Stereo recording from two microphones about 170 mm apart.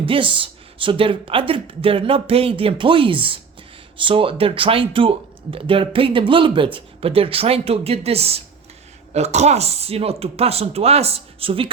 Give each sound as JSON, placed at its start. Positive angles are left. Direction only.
{"t": 0.0, "sound": "speech", "side_deg": -30}